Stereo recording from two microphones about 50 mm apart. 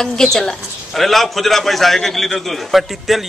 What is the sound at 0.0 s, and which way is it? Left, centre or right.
A man's voice, centre.